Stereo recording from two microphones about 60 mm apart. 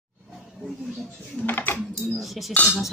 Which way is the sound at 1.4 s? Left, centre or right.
Left.